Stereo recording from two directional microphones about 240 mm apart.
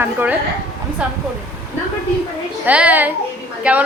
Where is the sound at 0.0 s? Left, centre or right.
Centre.